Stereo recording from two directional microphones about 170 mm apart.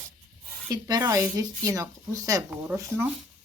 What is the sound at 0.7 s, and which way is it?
Speech, 20° right (ahead or behind).